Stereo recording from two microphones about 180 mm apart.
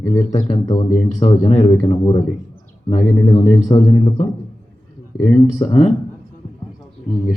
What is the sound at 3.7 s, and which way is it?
Speech, 30° left (ahead or behind).